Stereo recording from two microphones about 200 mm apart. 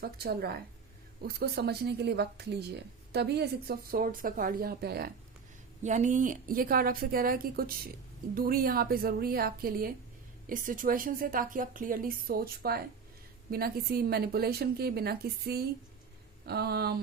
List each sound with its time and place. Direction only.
0.0 s a woman's voice: 50° right (ahead or behind)
5.8 s a woman's voice: 35° right (ahead or behind); by 17.0 s 50° right (ahead or behind)